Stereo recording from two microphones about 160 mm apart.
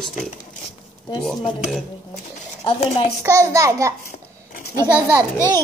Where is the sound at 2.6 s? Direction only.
35° left (ahead or behind).